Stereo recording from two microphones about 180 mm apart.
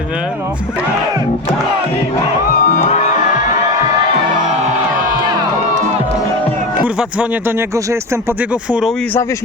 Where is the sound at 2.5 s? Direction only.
45° left (ahead or behind).